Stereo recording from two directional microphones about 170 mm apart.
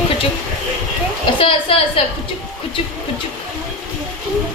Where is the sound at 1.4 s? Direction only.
35° left (ahead or behind).